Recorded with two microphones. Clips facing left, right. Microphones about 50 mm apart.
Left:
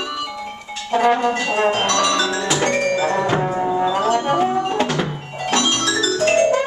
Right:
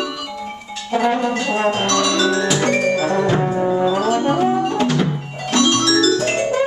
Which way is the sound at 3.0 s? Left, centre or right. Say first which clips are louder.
Right 1 dB; centre.